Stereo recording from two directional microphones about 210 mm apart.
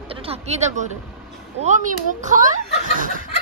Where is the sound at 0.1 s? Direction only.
25° right (ahead or behind).